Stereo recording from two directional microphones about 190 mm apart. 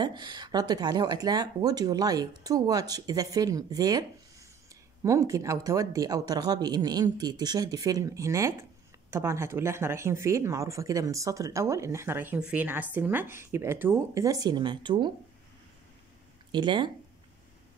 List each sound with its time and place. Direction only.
0.0 s speech: 25° right (ahead or behind)
16.5 s speech: 25° right (ahead or behind)